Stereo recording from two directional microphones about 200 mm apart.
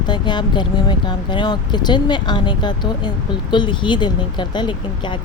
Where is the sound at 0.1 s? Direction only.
20° left (ahead or behind).